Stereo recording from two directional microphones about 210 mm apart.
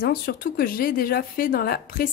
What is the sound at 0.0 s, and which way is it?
A woman's voice, 45° left (ahead or behind).